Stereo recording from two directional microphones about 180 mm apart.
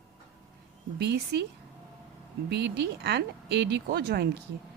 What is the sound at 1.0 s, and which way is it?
Speech, 65° right (ahead or behind).